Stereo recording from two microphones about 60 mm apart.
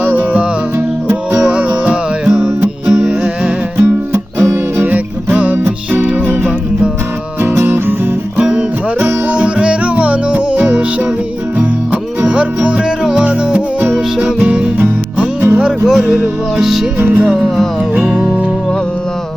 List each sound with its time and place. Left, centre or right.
0.0 s music: right
2.9 s music: centre
3.8 s music: right
4.9 s music: right
7.5 s music: right
8.4 s music: right
15.6 s music: centre
17.0 s music: right